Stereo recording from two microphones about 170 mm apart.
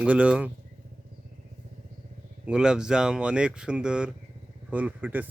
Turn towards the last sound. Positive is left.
turn(degrees=-10)  # may be behind; listen again after turning